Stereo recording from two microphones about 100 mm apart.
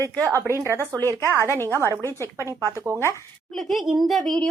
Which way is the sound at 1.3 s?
30° left (ahead or behind).